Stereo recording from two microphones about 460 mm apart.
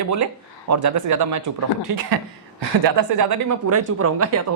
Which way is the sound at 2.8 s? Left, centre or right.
Right.